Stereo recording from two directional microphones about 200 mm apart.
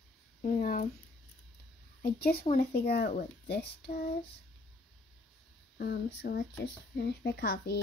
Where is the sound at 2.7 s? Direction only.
50° left (ahead or behind).